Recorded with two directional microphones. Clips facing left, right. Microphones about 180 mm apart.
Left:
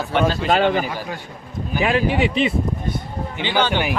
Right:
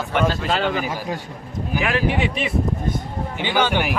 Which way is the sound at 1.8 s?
25° left (ahead or behind).